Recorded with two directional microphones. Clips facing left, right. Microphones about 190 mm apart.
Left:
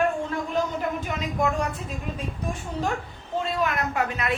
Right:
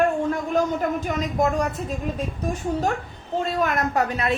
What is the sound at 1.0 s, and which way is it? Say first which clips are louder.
Speech: right 4 dB; 40° right (ahead or behind).